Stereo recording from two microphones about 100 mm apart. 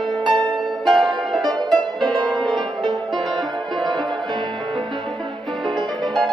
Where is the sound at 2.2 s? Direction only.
5° left (ahead or behind).